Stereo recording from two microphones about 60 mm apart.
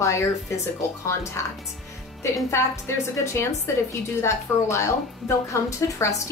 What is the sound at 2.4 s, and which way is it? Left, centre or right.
A woman's voice, left.